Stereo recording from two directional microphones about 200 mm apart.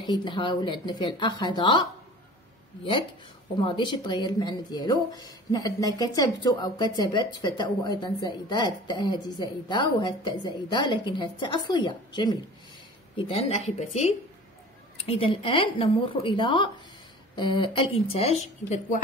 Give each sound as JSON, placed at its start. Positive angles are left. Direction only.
{"t": 0.0, "sound": "speech", "side_deg": 25}
{"t": 3.5, "sound": "a woman's voice", "side_deg": 25}